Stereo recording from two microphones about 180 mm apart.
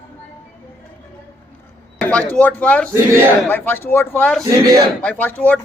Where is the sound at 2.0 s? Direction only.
5° left (ahead or behind).